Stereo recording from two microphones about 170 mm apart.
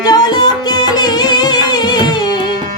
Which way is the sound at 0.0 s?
25° left (ahead or behind).